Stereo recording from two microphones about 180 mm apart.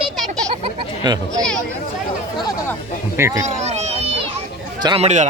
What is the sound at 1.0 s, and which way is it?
Speech, 25° right (ahead or behind).